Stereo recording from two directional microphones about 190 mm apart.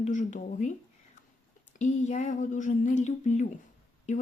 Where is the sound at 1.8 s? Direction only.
40° left (ahead or behind).